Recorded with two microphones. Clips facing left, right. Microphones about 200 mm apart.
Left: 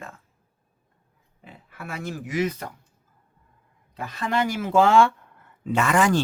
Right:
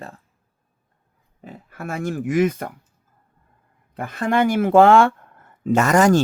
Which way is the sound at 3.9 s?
55° right (ahead or behind).